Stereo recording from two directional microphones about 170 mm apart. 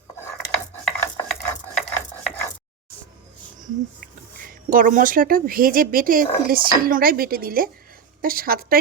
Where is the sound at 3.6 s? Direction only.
55° right (ahead or behind).